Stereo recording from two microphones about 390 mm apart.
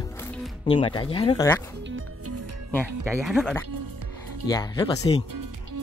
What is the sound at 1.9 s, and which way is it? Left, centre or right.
Music, right.